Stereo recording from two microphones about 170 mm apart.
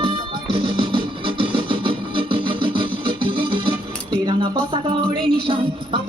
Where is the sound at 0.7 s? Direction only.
30° right (ahead or behind).